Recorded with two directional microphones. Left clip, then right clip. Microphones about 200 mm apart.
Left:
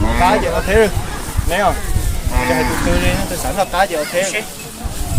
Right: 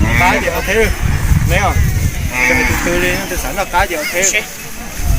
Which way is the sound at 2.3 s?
35° left (ahead or behind).